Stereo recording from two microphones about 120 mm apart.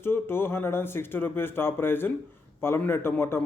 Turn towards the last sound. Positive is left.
turn(degrees=20)  # may be behind; listen again after turning